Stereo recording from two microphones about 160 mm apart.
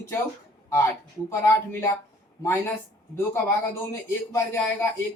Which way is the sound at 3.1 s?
15° left (ahead or behind).